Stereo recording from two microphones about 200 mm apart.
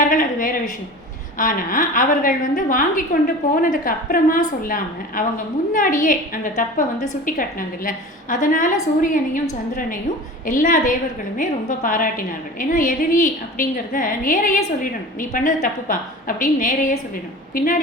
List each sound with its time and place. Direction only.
0.0 s a sound: 40° left (ahead or behind)
1.4 s a woman's voice: 40° left (ahead or behind)
10.4 s a woman's voice: 40° left (ahead or behind)